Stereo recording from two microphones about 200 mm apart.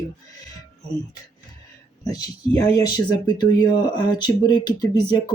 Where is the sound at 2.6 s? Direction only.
20° left (ahead or behind).